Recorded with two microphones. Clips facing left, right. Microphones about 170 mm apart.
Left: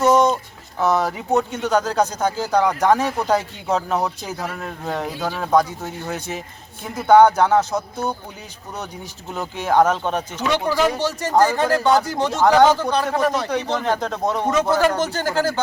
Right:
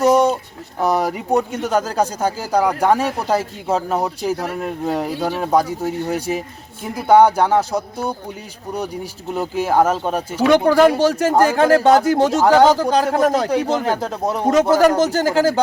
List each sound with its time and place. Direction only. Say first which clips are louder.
0.0 s a sound: right 2 dB; 10° right (ahead or behind)
0.8 s speech: right 1 dB; 10° right (ahead or behind)
9.3 s speech: right 2 dB; 10° right (ahead or behind)
10.4 s a man's voice: right 8 dB; 55° right (ahead or behind)
11.3 s speech: left 1 dB; 10° right (ahead or behind)
11.5 s speech: right 5 dB; 50° right (ahead or behind)
13.8 s speech: right 1 dB; 10° right (ahead or behind)
14.4 s speech: right 6 dB; 45° right (ahead or behind)